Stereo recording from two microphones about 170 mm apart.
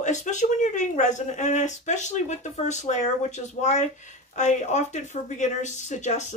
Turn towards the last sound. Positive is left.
turn(degrees=45)  # may be behind; listen again after turning